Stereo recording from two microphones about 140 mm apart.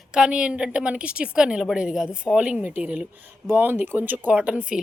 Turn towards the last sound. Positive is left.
turn(degrees=-10)  # may be behind; listen again after turning